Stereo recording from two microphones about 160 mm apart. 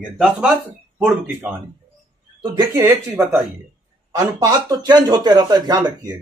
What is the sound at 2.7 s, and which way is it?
Speech, 15° right (ahead or behind).